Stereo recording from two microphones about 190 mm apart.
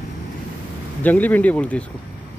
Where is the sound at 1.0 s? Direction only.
10° left (ahead or behind).